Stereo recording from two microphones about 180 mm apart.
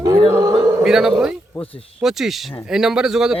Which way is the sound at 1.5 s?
10° left (ahead or behind).